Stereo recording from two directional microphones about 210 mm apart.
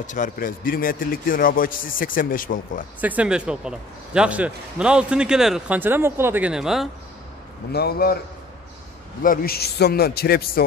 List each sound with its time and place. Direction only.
0.0 s a man's voice: 35° left (ahead or behind)
3.0 s a man's voice: 5° right (ahead or behind)
7.7 s a man's voice: 45° left (ahead or behind)
9.2 s a man's voice: 45° left (ahead or behind)